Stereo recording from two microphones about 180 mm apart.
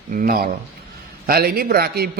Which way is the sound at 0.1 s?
50° right (ahead or behind).